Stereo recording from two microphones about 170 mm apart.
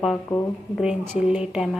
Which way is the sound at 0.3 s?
20° left (ahead or behind).